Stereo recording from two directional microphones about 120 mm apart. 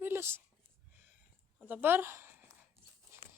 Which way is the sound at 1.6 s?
15° right (ahead or behind).